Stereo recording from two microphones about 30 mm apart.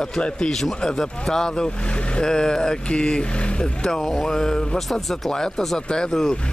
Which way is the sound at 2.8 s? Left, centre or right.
Left.